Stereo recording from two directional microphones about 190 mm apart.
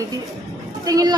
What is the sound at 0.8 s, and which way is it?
Speech, 20° right (ahead or behind).